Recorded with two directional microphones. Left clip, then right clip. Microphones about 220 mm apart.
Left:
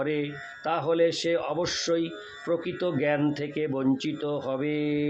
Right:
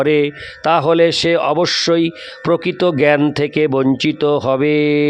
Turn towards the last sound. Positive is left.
turn(degrees=-45)  # may be behind; listen again after turning